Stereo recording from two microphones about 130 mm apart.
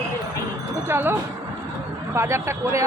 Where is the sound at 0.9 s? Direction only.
20° right (ahead or behind).